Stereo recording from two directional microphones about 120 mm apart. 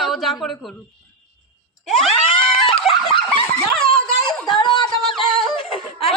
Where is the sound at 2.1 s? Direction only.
50° left (ahead or behind).